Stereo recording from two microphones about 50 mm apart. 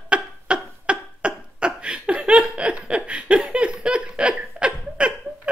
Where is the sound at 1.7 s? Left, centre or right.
Centre.